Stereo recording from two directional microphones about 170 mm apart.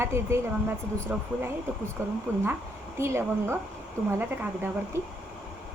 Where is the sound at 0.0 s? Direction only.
15° right (ahead or behind).